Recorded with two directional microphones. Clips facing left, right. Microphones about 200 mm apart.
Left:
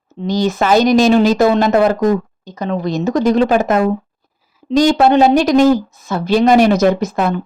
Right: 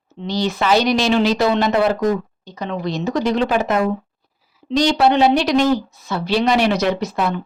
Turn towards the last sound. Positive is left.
turn(degrees=45)  # may be behind; listen again after turning